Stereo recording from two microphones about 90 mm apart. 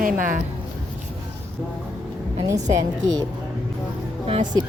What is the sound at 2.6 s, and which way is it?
Speech, 45° right (ahead or behind).